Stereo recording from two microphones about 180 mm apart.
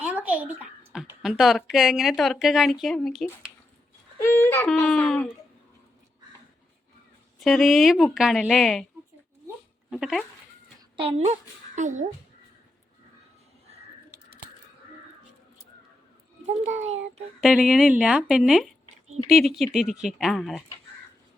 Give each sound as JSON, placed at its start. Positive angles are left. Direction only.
{"t": 0.0, "sound": "a sound", "side_deg": -10}
{"t": 1.2, "sound": "speech", "side_deg": 0}
{"t": 4.2, "sound": "speech", "side_deg": 15}
{"t": 7.3, "sound": "speech", "side_deg": 0}
{"t": 9.9, "sound": "speech", "side_deg": 0}
{"t": 10.9, "sound": "a child's voice", "side_deg": -35}
{"t": 16.5, "sound": "a child's voice", "side_deg": -40}
{"t": 17.4, "sound": "speech", "side_deg": 0}